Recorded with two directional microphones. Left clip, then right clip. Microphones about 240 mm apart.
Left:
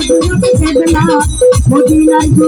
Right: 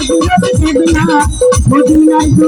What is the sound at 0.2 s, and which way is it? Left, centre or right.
Music, right.